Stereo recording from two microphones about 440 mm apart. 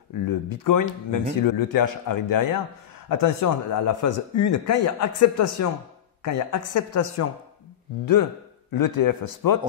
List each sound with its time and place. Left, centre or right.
0.5 s a man's voice: left